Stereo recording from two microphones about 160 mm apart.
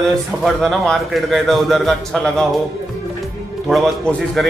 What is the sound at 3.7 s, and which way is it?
Speech, centre (ahead or behind).